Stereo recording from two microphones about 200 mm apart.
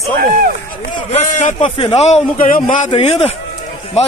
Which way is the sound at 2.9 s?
30° left (ahead or behind).